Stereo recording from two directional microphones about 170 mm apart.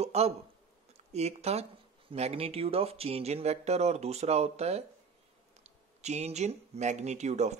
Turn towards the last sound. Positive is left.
turn(degrees=-40)  # may be behind; listen again after turning